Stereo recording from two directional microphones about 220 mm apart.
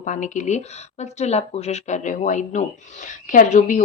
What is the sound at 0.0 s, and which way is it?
Speech, 35° left (ahead or behind).